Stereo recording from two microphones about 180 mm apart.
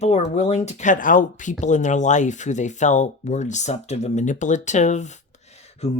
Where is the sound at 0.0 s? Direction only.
40° left (ahead or behind).